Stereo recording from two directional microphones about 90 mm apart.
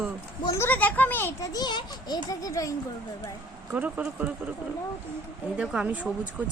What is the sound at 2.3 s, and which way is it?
Speech, 40° left (ahead or behind).